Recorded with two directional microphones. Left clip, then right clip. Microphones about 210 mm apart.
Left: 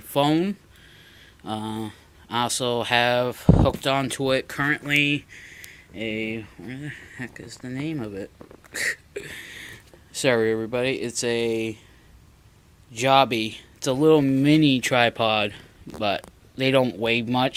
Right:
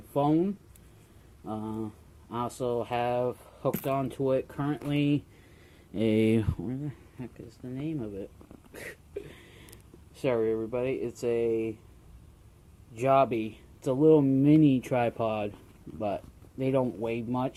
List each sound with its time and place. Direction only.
0.1 s speech: 15° left (ahead or behind)
1.5 s speech: 15° left (ahead or behind)
4.9 s speech: 15° right (ahead or behind)
5.9 s speech: 35° right (ahead or behind)
7.6 s speech: 25° left (ahead or behind)
8.7 s a sound: 25° left (ahead or behind)
10.1 s speech: 30° left (ahead or behind)
13.0 s speech: 25° left (ahead or behind)
16.0 s speech: 45° left (ahead or behind)
16.6 s speech: 10° left (ahead or behind)